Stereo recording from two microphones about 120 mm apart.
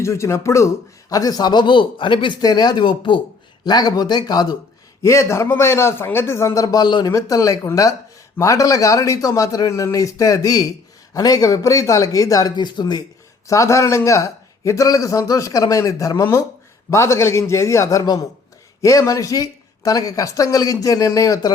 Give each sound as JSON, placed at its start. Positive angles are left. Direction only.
{"t": 0.0, "sound": "a man's voice", "side_deg": 25}
{"t": 5.0, "sound": "a man's voice", "side_deg": 25}
{"t": 13.5, "sound": "a man's voice", "side_deg": 25}